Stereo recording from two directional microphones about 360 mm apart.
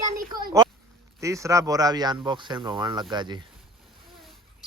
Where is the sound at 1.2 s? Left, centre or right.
Centre.